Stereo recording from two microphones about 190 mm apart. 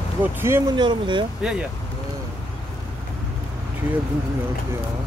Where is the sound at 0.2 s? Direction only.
15° right (ahead or behind).